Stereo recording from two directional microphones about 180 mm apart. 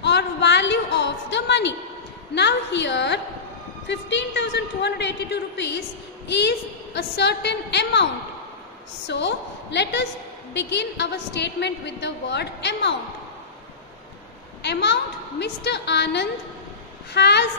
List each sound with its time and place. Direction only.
0.0 s a sound: 75° left (ahead or behind)
2.3 s a woman's voice: 75° left (ahead or behind)
14.6 s a woman's voice: 70° left (ahead or behind)